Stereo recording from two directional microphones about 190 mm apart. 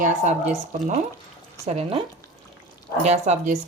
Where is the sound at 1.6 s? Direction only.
35° right (ahead or behind).